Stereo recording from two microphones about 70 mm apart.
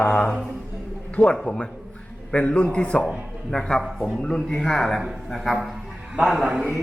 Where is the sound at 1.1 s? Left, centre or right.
Centre.